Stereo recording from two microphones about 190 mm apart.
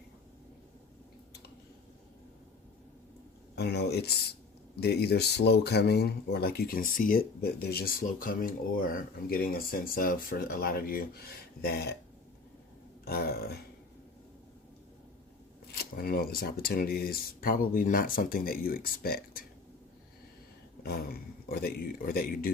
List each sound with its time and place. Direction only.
3.5 s speech: 60° left (ahead or behind)
13.1 s a sound: 55° left (ahead or behind)
15.7 s speech: 50° left (ahead or behind)
20.8 s speech: 55° left (ahead or behind)